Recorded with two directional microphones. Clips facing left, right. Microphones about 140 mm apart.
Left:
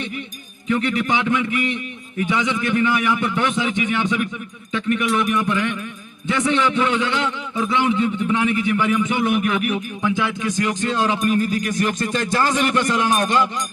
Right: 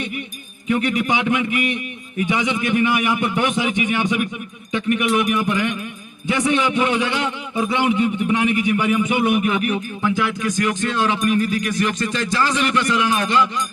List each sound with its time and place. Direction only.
0.7 s a man's voice: 20° right (ahead or behind); by 9.8 s centre (ahead or behind)
10.0 s music: 20° left (ahead or behind); by 13.5 s 45° left (ahead or behind)